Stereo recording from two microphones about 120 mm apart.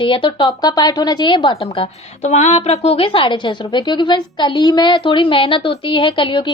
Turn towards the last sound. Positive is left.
turn(degrees=45)  # may be behind; listen again after turning